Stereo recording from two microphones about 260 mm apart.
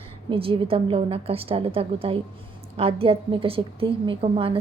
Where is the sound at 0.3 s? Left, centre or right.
Centre.